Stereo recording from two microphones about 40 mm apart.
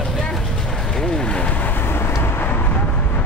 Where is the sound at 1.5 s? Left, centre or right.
Left.